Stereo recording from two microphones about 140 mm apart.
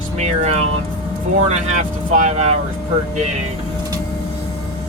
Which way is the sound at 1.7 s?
55° right (ahead or behind).